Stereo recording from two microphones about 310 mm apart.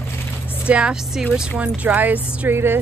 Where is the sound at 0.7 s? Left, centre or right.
Centre.